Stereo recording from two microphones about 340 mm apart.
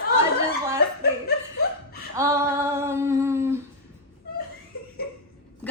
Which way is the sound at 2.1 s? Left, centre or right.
Centre.